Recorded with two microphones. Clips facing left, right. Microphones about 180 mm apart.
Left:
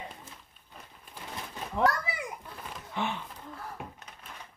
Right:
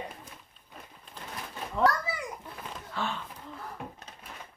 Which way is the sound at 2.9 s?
20° left (ahead or behind).